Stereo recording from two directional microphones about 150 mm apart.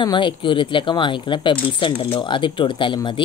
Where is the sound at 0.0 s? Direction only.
30° left (ahead or behind).